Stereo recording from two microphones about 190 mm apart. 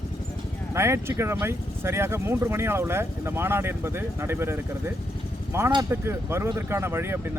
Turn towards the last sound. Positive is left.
turn(degrees=-15)  # may be behind; listen again after turning